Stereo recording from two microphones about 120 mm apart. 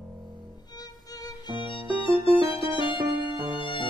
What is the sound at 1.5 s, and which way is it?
Music, 45° left (ahead or behind).